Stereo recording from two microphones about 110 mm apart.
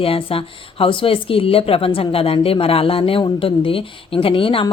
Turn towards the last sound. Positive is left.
turn(degrees=55)  # may be behind; listen again after turning